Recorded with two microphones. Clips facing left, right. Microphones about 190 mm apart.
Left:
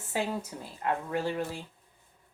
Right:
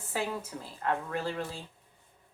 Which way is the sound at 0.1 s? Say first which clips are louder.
Left 2 dB; 20° left (ahead or behind).